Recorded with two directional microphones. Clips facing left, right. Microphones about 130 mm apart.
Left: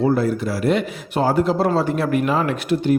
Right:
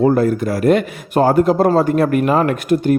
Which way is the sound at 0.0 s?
50° right (ahead or behind).